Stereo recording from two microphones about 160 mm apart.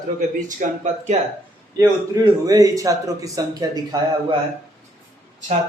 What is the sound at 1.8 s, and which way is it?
A man's voice, 20° right (ahead or behind).